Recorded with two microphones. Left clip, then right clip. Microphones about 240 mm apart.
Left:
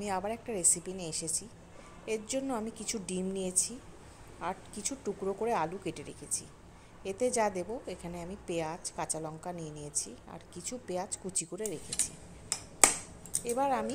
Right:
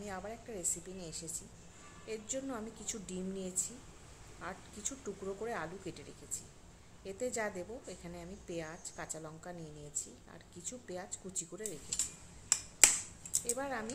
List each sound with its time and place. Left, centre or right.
0.0 s a woman's voice: left
13.4 s a woman's voice: left